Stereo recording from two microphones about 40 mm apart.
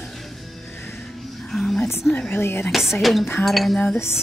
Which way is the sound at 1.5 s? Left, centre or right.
Centre.